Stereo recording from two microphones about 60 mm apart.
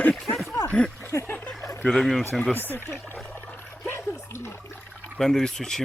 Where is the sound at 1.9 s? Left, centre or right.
Centre.